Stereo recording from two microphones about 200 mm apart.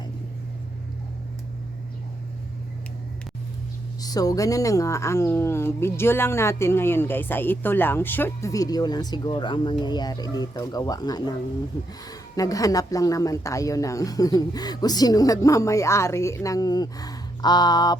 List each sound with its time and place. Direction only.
4.0 s speech: 20° left (ahead or behind)